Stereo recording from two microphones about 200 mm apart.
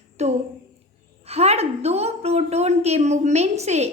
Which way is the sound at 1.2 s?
30° right (ahead or behind).